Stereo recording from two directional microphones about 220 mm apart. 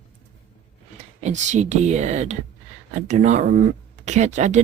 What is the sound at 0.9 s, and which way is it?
Speech, 30° right (ahead or behind).